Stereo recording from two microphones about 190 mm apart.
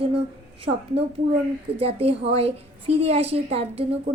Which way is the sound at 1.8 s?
30° right (ahead or behind).